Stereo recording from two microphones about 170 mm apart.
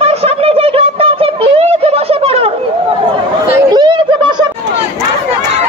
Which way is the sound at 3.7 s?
25° right (ahead or behind).